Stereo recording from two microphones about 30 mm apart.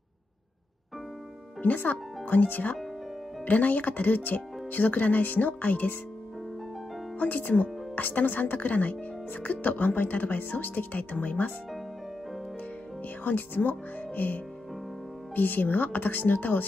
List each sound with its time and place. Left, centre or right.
1.6 s speech: left
3.4 s speech: left
7.2 s speech: left
7.9 s speech: left
8.5 s speech: left
13.2 s speech: left